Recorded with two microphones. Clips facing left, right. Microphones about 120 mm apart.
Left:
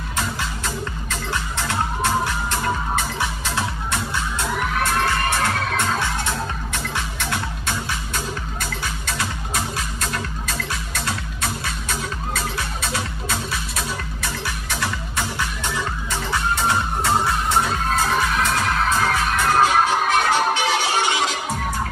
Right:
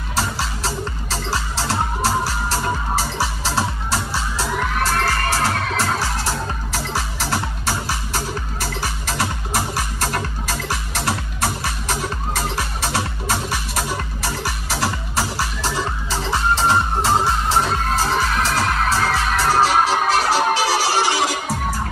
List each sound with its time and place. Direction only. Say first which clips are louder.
0.1 s music: right 3 dB; 35° right (ahead or behind)
21.3 s music: right 2 dB; 10° right (ahead or behind)